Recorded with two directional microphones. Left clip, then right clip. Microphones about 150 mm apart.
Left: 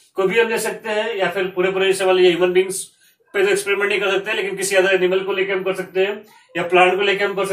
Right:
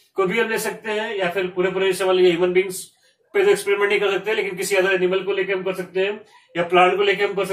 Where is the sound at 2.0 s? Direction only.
25° left (ahead or behind).